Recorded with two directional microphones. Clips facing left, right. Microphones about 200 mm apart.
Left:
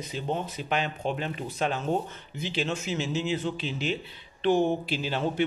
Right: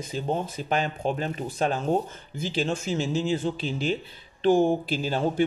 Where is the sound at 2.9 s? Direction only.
35° right (ahead or behind).